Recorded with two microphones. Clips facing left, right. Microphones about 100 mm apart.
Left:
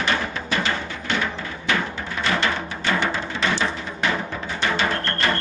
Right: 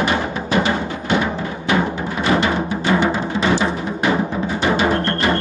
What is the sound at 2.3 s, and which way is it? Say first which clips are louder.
Music: right 6 dB; 20° right (ahead or behind).